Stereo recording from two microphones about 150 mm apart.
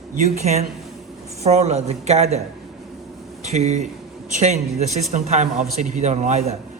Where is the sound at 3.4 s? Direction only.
50° right (ahead or behind).